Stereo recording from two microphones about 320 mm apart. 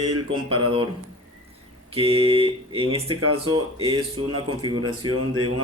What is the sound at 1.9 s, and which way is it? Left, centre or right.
Speech, centre.